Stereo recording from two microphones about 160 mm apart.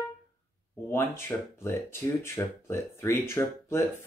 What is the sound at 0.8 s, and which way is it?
Speech, 15° left (ahead or behind).